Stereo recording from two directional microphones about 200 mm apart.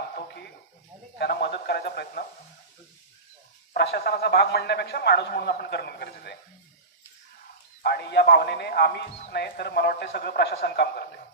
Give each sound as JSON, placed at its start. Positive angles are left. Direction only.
{"t": 1.2, "sound": "a man's voice", "side_deg": 55}
{"t": 3.8, "sound": "a man's voice", "side_deg": 50}
{"t": 7.8, "sound": "a man's voice", "side_deg": 55}